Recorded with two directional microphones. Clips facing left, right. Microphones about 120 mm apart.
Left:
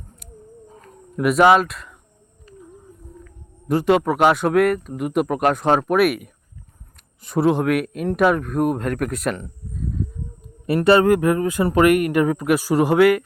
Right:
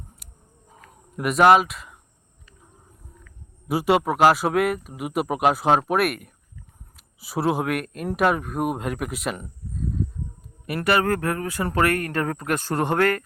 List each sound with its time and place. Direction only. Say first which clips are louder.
0.9 s speech: left 6 dB; 5° right (ahead or behind)
2.5 s whale vocalization: left 15 dB; 40° left (ahead or behind)
3.7 s speech: left 3 dB; 10° right (ahead or behind)
10.4 s a sound: left 8 dB; 25° left (ahead or behind)
11.1 s speech: left 8 dB; 15° left (ahead or behind)